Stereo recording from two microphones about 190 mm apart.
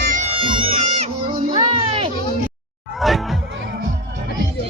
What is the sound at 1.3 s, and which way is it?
Music, 45° right (ahead or behind).